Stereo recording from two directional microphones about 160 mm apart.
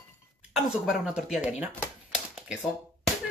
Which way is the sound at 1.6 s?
5° right (ahead or behind).